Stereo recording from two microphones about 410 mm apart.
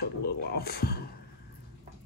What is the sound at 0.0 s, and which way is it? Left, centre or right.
Speech, left.